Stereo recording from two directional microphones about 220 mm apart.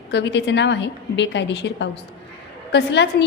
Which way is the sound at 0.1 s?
55° left (ahead or behind).